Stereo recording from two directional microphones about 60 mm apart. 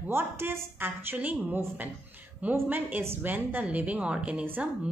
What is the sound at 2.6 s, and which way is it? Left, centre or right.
A woman's voice, right.